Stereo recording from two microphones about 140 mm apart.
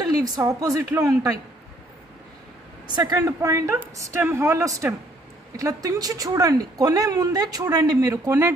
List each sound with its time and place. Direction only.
0.0 s a woman's voice: 30° right (ahead or behind)
2.9 s a woman's voice: 25° right (ahead or behind)